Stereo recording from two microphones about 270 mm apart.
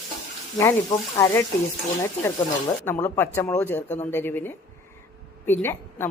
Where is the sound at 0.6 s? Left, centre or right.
Centre.